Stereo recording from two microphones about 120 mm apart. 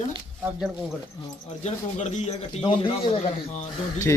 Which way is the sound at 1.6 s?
75° left (ahead or behind).